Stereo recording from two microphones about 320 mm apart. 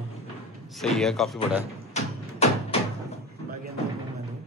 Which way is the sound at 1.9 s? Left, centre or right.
Centre.